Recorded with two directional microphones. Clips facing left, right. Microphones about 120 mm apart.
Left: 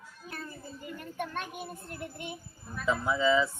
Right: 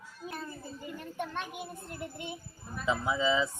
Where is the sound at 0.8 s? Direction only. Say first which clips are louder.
Left 1 dB; 20° right (ahead or behind).